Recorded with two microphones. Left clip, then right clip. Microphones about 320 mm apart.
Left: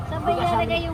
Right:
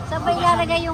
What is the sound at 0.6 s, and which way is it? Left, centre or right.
Speech, right.